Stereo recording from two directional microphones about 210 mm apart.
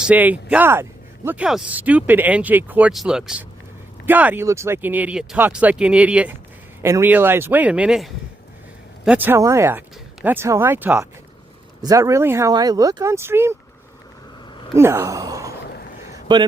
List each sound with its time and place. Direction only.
0.0 s speech: 5° right (ahead or behind)
14.8 s a man's voice: 10° right (ahead or behind)